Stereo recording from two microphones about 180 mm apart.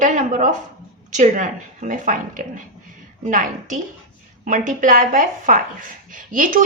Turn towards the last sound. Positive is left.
turn(degrees=-45)  # may be behind; listen again after turning